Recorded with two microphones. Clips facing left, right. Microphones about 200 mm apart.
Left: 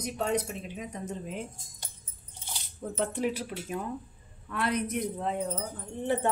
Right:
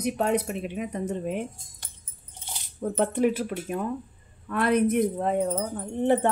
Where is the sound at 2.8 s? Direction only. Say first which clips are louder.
Right 7 dB; 55° right (ahead or behind).